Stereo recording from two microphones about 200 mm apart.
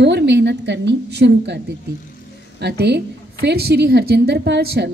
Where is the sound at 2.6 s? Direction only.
55° right (ahead or behind).